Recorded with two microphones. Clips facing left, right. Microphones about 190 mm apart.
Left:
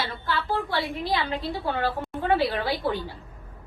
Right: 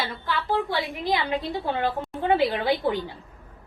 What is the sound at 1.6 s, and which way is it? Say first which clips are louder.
A woman's voice: right 1 dB; 20° right (ahead or behind).